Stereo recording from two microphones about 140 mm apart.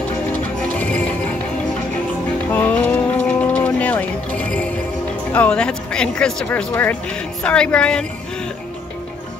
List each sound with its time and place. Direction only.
0.3 s music: 10° left (ahead or behind)
2.5 s music: 10° left (ahead or behind)
5.3 s speech: 10° left (ahead or behind)